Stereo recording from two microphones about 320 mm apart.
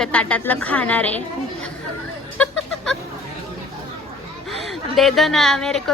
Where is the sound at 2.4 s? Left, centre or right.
Centre.